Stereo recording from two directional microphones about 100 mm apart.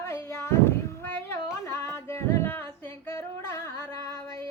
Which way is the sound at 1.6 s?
25° left (ahead or behind).